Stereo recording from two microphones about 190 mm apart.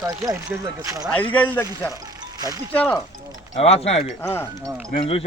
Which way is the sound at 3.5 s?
35° left (ahead or behind).